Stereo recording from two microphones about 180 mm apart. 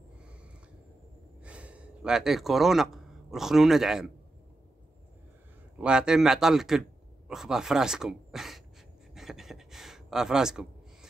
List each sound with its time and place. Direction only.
1.4 s speech: 5° right (ahead or behind)
5.8 s speech: 5° right (ahead or behind)
9.1 s a sound: centre (ahead or behind)